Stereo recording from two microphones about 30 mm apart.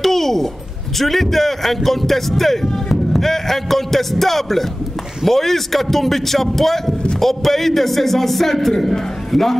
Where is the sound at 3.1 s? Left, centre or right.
Centre.